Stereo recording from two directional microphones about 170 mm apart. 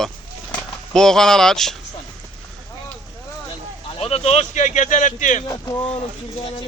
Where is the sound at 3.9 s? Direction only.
35° left (ahead or behind).